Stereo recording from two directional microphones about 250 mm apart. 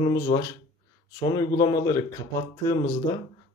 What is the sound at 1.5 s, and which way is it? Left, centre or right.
Speech, centre.